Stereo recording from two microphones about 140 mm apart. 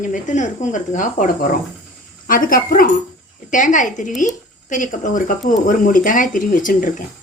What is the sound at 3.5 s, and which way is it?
A woman's voice, 65° left (ahead or behind).